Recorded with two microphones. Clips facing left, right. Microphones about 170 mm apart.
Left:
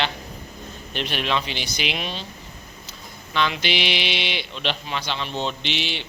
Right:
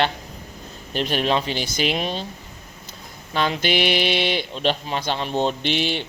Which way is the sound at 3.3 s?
40° right (ahead or behind).